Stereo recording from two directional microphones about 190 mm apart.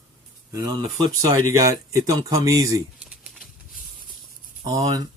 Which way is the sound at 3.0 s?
5° right (ahead or behind).